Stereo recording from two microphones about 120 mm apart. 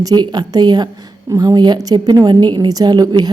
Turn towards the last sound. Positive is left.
turn(degrees=-35)  # may be behind; listen again after turning